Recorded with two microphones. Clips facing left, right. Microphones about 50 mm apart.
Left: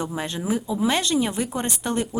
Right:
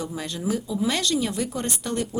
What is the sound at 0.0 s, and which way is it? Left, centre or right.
Speech, left.